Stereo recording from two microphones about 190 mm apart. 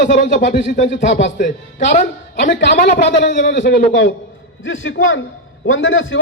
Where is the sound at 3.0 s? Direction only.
65° left (ahead or behind).